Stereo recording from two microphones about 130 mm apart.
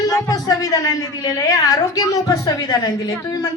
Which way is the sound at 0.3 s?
30° left (ahead or behind).